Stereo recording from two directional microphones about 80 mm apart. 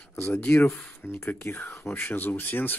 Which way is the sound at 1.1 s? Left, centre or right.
Left.